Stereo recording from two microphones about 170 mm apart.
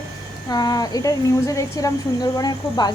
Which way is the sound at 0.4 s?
25° left (ahead or behind).